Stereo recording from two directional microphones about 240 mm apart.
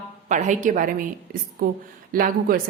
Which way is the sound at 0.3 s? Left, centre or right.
Right.